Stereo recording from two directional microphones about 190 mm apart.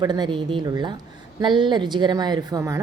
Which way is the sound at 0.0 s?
20° right (ahead or behind).